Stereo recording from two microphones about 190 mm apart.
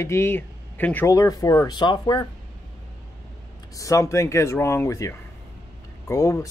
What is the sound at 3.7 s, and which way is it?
Speech, 15° left (ahead or behind).